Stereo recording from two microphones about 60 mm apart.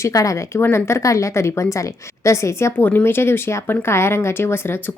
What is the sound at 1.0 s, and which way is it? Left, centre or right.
A woman's voice, left.